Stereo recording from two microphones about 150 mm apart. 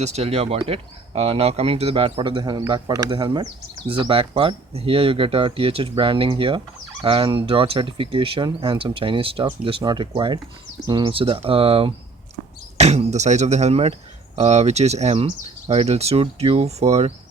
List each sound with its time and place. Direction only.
0.0 s speech: 45° right (ahead or behind)